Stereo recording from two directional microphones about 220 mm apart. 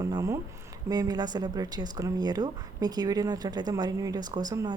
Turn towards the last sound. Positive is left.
turn(degrees=-15)  # may be behind; listen again after turning